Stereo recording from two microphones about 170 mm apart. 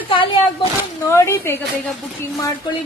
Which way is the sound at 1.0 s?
15° left (ahead or behind).